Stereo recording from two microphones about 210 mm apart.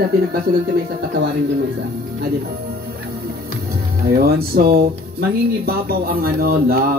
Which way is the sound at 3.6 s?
45° right (ahead or behind).